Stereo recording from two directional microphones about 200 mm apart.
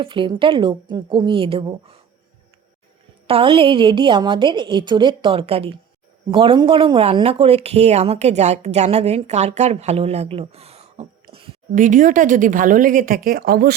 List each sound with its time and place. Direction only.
0.0 s a woman's voice: 25° right (ahead or behind)
3.2 s a woman's voice: 25° right (ahead or behind)
11.7 s speech: 40° right (ahead or behind)